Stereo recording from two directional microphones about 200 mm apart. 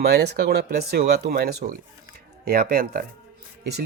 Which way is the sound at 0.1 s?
55° right (ahead or behind).